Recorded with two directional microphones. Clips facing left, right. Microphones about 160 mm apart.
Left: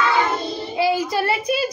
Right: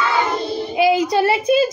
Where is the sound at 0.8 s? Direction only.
20° right (ahead or behind).